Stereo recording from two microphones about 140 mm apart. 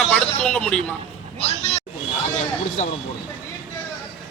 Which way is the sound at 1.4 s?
45° left (ahead or behind).